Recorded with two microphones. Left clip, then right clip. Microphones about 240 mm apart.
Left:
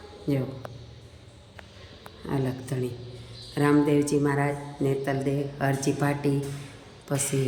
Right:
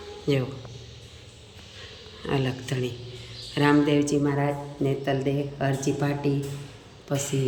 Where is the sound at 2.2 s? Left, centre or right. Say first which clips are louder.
Right 3 dB; centre.